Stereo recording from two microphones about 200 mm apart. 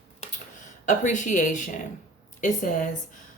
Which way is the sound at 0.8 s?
40° left (ahead or behind).